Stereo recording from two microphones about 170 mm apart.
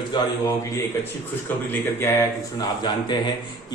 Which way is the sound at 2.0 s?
20° left (ahead or behind).